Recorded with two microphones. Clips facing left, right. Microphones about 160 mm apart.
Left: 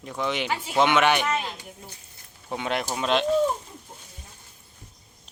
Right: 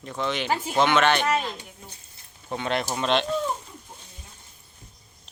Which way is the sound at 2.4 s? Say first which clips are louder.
Right 1 dB; 10° left (ahead or behind).